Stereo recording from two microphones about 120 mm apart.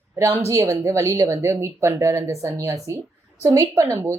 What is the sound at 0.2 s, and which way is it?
A woman's voice, 25° right (ahead or behind).